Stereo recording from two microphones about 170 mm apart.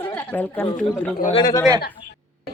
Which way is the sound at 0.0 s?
10° left (ahead or behind).